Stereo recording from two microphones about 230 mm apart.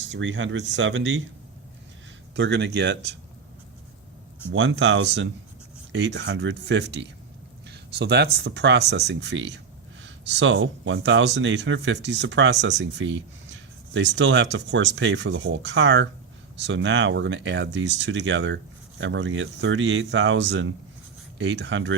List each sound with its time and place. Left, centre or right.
0.0 s speech: right
2.3 s speech: right
4.5 s speech: right